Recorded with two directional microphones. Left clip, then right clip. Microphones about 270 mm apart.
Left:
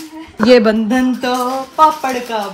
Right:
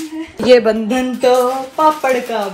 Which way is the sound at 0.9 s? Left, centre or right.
Centre.